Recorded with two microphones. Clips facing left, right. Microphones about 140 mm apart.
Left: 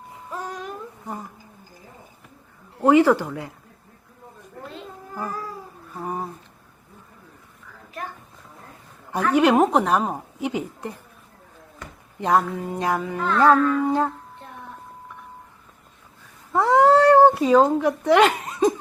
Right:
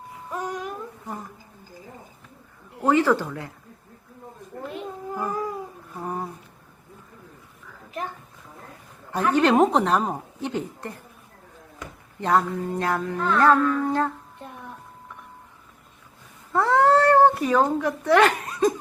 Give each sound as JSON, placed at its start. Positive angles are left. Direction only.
{"t": 1.0, "sound": "speech", "side_deg": 15}
{"t": 2.8, "sound": "a woman's voice", "side_deg": 15}
{"t": 4.7, "sound": "a sound", "side_deg": -15}
{"t": 6.0, "sound": "a sound", "side_deg": 10}
{"t": 9.3, "sound": "a woman's voice", "side_deg": 10}
{"t": 12.2, "sound": "a woman's voice", "side_deg": 15}
{"t": 16.5, "sound": "cat", "side_deg": 15}